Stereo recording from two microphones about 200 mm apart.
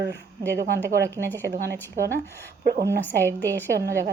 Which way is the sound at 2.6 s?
45° right (ahead or behind).